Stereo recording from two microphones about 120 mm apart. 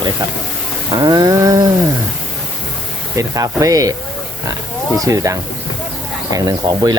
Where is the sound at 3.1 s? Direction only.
30° right (ahead or behind).